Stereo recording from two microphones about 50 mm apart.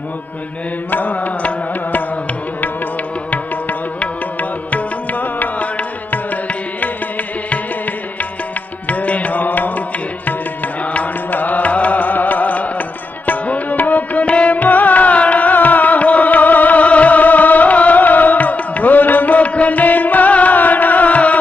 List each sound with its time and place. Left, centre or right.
0.8 s music: left
4.0 s music: left
8.8 s music: left